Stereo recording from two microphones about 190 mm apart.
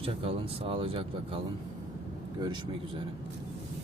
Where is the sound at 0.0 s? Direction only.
30° right (ahead or behind).